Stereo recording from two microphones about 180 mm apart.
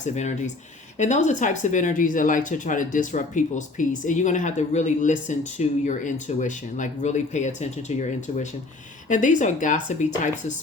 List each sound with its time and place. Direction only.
0.0 s speech: 40° left (ahead or behind)